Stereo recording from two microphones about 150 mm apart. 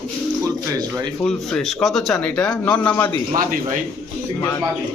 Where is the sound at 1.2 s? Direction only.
5° left (ahead or behind).